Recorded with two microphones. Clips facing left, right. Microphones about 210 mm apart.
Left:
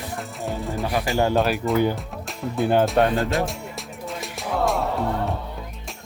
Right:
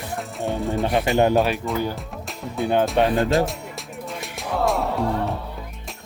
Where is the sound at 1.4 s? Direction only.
Centre (ahead or behind).